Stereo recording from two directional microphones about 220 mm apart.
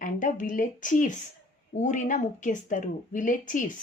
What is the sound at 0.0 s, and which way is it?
A woman's voice, 35° left (ahead or behind).